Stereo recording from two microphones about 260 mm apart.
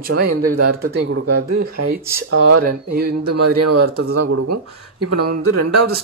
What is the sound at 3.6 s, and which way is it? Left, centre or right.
Speech, right.